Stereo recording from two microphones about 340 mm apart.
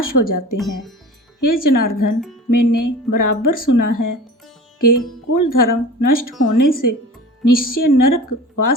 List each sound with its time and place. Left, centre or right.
0.0 s speech: left